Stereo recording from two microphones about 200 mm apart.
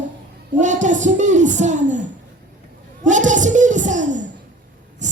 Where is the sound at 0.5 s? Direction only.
40° right (ahead or behind).